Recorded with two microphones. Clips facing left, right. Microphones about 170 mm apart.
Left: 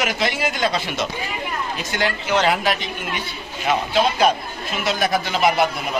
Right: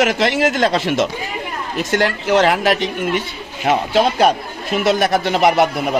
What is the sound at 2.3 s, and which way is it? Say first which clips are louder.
A man's voice: right 5 dB; 65° right (ahead or behind).